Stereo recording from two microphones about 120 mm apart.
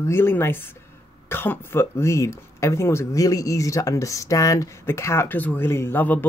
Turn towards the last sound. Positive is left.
turn(degrees=15)  # may be behind; listen again after turning